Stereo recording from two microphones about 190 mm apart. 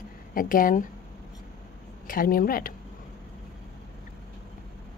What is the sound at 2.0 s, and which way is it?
Speech, 50° left (ahead or behind).